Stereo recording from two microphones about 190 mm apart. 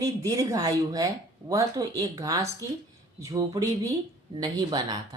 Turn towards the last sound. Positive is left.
turn(degrees=-20)  # may be behind; listen again after turning